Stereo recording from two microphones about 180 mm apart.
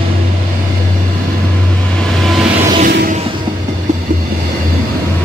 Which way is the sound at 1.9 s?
5° left (ahead or behind).